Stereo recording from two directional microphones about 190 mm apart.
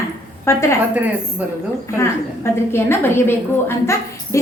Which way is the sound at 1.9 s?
15° left (ahead or behind).